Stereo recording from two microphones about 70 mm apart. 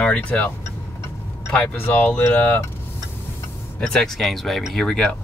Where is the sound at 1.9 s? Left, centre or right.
Left.